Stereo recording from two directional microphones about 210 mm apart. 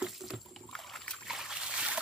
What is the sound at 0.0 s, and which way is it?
Trickle, centre (ahead or behind).